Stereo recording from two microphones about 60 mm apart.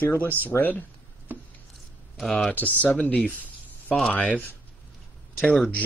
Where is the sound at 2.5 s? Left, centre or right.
Left.